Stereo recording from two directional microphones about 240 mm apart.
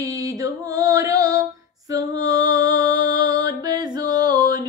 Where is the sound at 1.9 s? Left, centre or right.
Centre.